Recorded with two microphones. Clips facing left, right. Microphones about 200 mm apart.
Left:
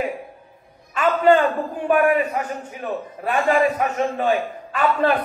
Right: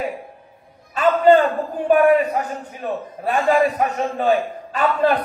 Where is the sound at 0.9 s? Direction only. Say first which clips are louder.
Right 2 dB; 40° right (ahead or behind).